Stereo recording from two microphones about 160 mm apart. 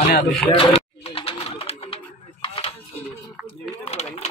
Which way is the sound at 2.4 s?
35° left (ahead or behind).